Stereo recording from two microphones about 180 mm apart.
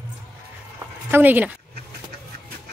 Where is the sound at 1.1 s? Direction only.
10° right (ahead or behind).